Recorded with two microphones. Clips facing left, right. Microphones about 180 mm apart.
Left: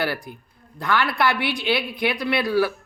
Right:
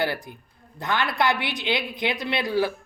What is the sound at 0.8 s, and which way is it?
Speech, 20° right (ahead or behind).